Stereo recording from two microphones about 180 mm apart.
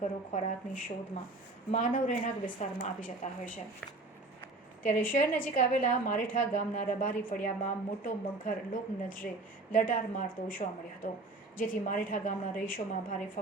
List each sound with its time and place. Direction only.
0.0 s a woman's voice: 40° left (ahead or behind)
4.8 s a woman's voice: 50° left (ahead or behind)